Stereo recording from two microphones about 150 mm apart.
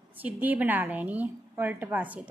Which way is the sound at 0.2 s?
10° right (ahead or behind).